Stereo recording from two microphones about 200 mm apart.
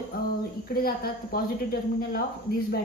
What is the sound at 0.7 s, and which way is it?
A woman's voice, 50° left (ahead or behind).